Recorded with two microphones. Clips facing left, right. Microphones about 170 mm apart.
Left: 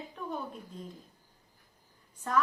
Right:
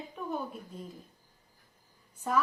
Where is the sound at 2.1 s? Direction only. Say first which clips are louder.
Even; 10° right (ahead or behind).